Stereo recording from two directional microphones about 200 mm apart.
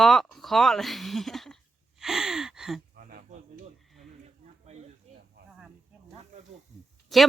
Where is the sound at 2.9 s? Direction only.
45° right (ahead or behind).